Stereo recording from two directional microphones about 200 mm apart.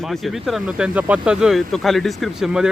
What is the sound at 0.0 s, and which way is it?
Speech, centre (ahead or behind).